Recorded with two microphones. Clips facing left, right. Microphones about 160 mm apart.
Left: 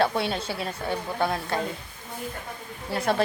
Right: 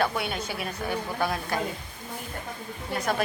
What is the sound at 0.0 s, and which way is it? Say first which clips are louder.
Speech: left 3 dB; 30° left (ahead or behind).